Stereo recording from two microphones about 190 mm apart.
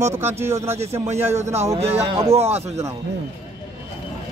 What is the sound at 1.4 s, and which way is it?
Speech, 15° right (ahead or behind).